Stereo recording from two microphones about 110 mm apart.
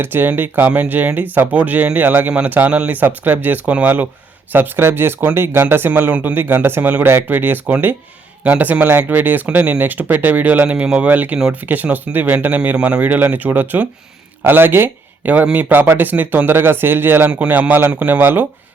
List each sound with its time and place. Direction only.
0.0 s speech: 20° right (ahead or behind)